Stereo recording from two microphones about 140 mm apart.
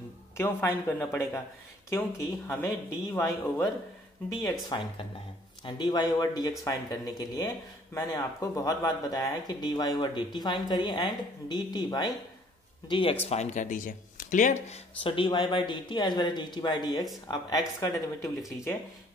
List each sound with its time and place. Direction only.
0.4 s speech: 15° left (ahead or behind); by 13.2 s 40° left (ahead or behind)
13.3 s speech: 55° left (ahead or behind)
15.0 s speech: 35° left (ahead or behind)